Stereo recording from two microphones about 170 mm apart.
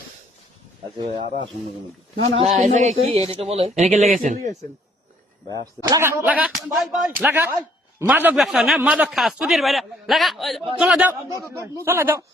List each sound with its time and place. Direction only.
0.9 s speech: 45° right (ahead or behind)
5.8 s speech: 20° right (ahead or behind)
11.3 s a man's voice: 20° left (ahead or behind)
11.9 s speech: 15° right (ahead or behind)